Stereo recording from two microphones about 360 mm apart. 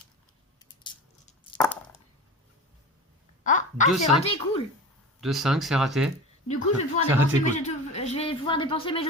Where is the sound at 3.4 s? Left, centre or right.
Left.